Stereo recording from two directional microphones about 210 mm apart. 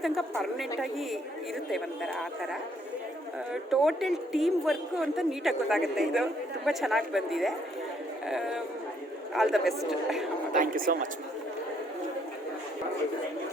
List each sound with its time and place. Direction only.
0.0 s a woman's voice: centre (ahead or behind)
10.5 s speech: 40° right (ahead or behind)